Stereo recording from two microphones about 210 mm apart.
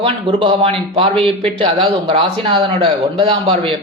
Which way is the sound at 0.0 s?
25° right (ahead or behind).